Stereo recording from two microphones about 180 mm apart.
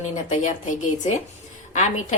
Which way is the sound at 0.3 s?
45° left (ahead or behind).